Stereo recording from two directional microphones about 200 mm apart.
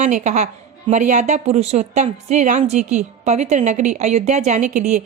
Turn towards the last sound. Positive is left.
turn(degrees=-35)  # may be behind; listen again after turning